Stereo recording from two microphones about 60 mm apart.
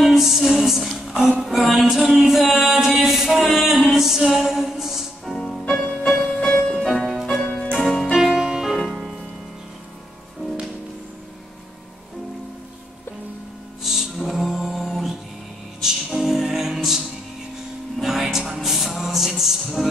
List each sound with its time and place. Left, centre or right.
0.0 s music: centre
6.1 s music: centre
6.9 s music: centre
7.4 s music: centre
7.8 s music: centre
13.8 s music: centre